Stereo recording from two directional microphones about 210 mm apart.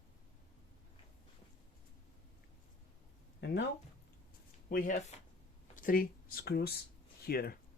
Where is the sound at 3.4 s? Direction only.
55° left (ahead or behind).